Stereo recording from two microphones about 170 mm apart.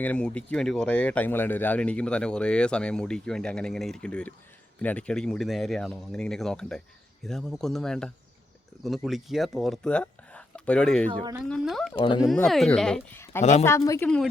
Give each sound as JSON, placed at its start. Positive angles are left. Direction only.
{"t": 0.0, "sound": "speech", "side_deg": 5}
{"t": 11.1, "sound": "a woman's voice", "side_deg": -30}
{"t": 11.4, "sound": "speech", "side_deg": 0}
{"t": 11.9, "sound": "speech", "side_deg": 30}
{"t": 12.5, "sound": "speech", "side_deg": 0}
{"t": 13.4, "sound": "speech", "side_deg": 40}
{"t": 13.7, "sound": "a woman's voice", "side_deg": 20}